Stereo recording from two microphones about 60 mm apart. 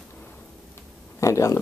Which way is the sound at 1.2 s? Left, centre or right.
Left.